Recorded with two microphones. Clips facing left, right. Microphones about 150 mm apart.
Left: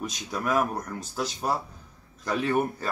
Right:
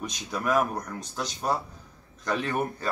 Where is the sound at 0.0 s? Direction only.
Centre (ahead or behind).